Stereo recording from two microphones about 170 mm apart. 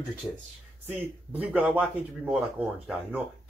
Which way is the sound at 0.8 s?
10° right (ahead or behind).